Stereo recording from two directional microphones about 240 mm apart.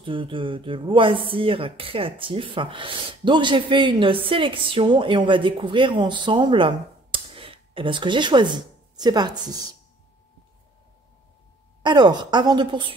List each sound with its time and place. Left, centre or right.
0.0 s speech: right
11.8 s speech: centre